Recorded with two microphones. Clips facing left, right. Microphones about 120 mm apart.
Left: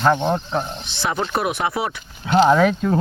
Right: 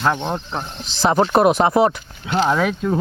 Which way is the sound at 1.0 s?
35° right (ahead or behind).